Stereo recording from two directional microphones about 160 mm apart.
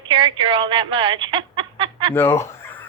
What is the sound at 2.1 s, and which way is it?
Fowl, 15° left (ahead or behind).